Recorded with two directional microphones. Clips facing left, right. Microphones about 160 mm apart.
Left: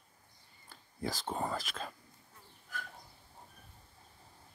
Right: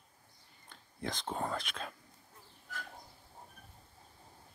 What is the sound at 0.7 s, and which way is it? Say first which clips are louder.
Speech: left 2 dB; 5° left (ahead or behind).